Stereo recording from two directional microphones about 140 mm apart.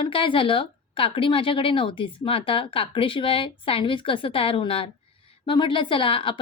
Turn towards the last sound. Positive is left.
turn(degrees=40)  # may be behind; listen again after turning